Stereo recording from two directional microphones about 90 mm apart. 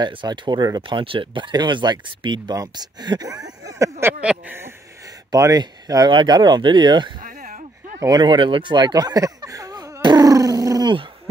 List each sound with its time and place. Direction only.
0.0 s speech: 55° right (ahead or behind)
0.7 s speech: 65° right (ahead or behind)
2.5 s speech: 45° right (ahead or behind)
4.2 s speech: 10° right (ahead or behind)
5.3 s speech: 45° right (ahead or behind)
6.0 s speech: 55° right (ahead or behind)
10.0 s dog: 45° right (ahead or behind)